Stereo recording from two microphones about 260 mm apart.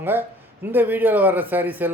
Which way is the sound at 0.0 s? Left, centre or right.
Centre.